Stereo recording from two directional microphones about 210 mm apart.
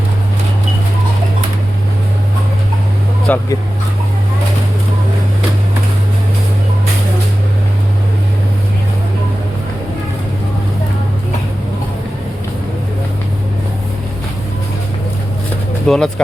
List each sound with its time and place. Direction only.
3.2 s speech: 10° left (ahead or behind)
15.9 s speech: centre (ahead or behind)